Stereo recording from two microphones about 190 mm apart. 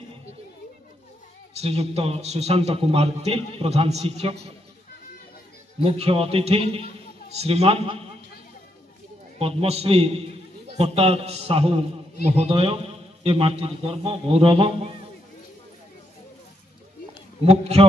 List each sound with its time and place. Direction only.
1.5 s a man's voice: 35° right (ahead or behind)
5.9 s a man's voice: 30° right (ahead or behind)
9.4 s a man's voice: 30° right (ahead or behind)
17.5 s a man's voice: 35° right (ahead or behind)